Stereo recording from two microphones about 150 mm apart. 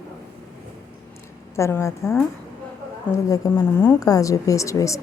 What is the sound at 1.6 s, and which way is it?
A woman's voice, 20° left (ahead or behind).